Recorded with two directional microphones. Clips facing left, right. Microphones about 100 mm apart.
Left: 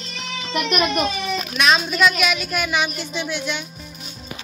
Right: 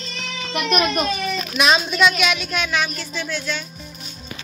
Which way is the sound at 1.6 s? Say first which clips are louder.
Even; centre (ahead or behind).